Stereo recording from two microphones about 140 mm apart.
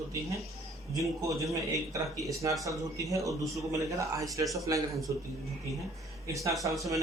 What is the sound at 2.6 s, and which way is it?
Speech, 25° right (ahead or behind).